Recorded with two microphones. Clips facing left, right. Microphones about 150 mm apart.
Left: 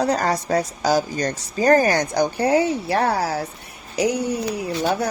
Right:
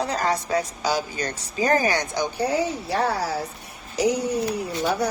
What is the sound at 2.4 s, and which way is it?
Speech, 70° left (ahead or behind).